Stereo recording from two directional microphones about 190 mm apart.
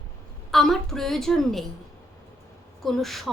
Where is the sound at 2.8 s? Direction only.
Centre (ahead or behind).